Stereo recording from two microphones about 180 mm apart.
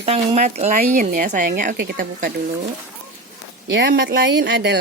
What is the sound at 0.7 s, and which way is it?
Speech, 50° right (ahead or behind).